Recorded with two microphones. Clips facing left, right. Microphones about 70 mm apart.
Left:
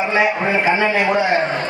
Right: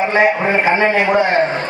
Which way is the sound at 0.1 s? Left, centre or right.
Right.